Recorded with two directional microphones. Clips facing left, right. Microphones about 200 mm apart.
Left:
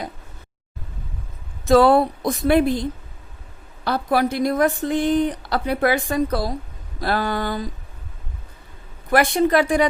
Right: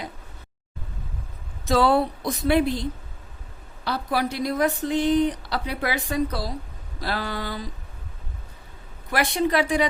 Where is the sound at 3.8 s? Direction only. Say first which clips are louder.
Left 5 dB; 50° left (ahead or behind).